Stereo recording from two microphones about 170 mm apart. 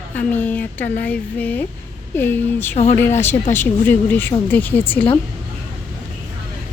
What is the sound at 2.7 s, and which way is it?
Speech, 45° left (ahead or behind).